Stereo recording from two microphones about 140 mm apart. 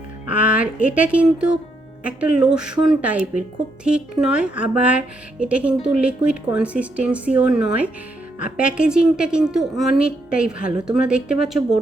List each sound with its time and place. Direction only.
0.3 s a woman's voice: 10° right (ahead or behind)